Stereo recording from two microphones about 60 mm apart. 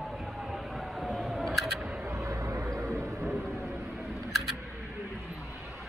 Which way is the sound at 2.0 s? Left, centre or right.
Right.